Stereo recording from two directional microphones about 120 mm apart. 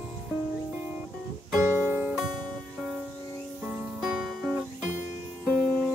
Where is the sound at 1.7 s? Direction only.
20° right (ahead or behind).